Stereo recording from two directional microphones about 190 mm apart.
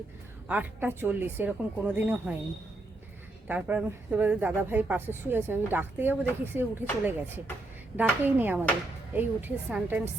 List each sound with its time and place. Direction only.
0.4 s a woman's voice: 10° right (ahead or behind)
3.4 s a woman's voice: 10° right (ahead or behind)